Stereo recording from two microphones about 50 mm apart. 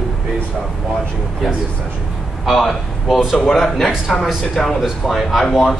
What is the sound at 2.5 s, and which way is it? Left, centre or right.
A man's voice, centre.